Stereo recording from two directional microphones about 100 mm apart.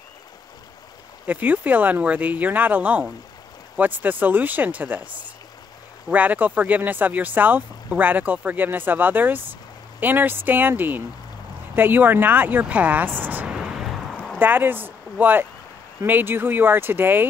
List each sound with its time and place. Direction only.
1.2 s speech: 15° right (ahead or behind)
14.1 s a sound: 5° left (ahead or behind)
14.4 s speech: 20° right (ahead or behind)